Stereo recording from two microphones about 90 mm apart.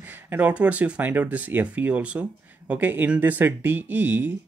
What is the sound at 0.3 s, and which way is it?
Speech, 15° right (ahead or behind).